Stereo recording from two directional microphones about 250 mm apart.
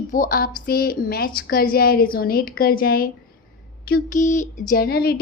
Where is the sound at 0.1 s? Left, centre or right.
Left.